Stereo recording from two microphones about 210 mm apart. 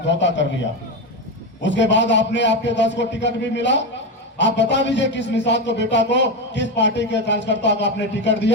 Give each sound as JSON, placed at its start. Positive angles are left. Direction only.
{"t": 0.0, "sound": "a man's voice", "side_deg": 60}
{"t": 1.6, "sound": "a man's voice", "side_deg": 60}